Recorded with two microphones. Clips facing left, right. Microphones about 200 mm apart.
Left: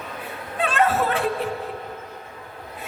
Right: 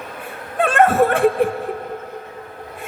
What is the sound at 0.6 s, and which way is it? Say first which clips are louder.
Chuckle: right 7 dB; 50° right (ahead or behind).